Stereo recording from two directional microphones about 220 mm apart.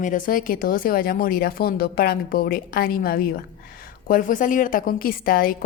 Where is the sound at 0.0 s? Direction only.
35° left (ahead or behind).